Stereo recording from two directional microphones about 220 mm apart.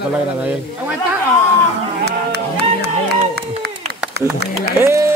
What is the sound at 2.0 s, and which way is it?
Music, 50° right (ahead or behind).